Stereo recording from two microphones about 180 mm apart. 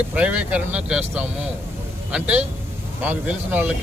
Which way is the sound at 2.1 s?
5° right (ahead or behind).